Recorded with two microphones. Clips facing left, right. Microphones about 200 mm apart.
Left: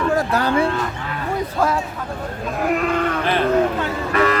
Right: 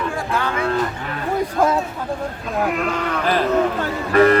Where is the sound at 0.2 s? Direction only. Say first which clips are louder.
Left 4 dB; 40° left (ahead or behind).